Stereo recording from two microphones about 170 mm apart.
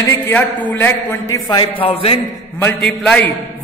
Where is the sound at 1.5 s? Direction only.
30° left (ahead or behind).